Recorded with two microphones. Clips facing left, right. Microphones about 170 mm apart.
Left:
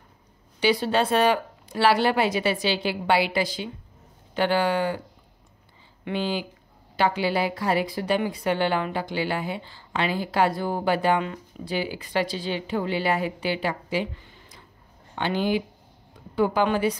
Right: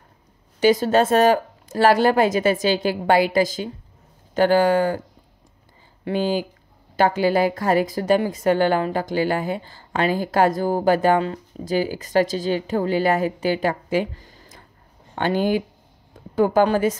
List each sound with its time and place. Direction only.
0.6 s a woman's voice: 45° right (ahead or behind)
6.0 s a woman's voice: 45° right (ahead or behind)